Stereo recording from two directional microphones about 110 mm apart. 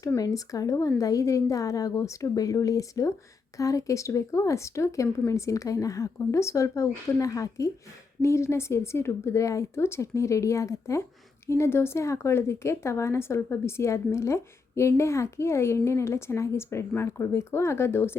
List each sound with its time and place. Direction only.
0.2 s a woman's voice: 30° left (ahead or behind)